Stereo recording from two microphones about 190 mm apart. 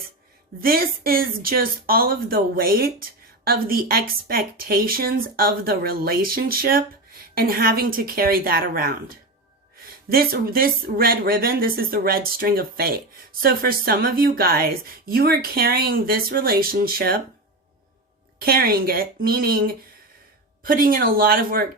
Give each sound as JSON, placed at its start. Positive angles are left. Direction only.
{"t": 0.6, "sound": "speech", "side_deg": -50}
{"t": 18.3, "sound": "speech", "side_deg": -50}